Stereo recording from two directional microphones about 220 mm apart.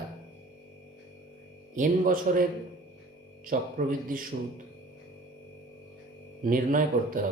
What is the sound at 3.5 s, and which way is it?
Speech, 40° right (ahead or behind).